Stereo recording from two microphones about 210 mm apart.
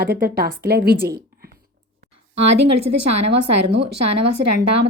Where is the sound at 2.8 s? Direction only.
30° right (ahead or behind).